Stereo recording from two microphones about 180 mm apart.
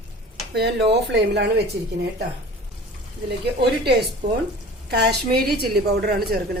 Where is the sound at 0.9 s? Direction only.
70° right (ahead or behind).